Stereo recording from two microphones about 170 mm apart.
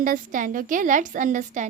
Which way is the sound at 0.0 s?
50° right (ahead or behind).